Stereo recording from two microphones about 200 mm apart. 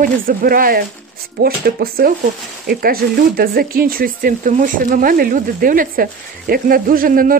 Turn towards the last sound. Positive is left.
turn(degrees=-45)  # may be behind; listen again after turning